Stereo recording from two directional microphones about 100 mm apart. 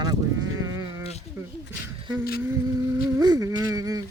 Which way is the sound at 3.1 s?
40° right (ahead or behind).